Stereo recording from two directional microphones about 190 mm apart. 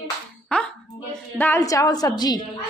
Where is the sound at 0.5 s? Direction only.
5° left (ahead or behind).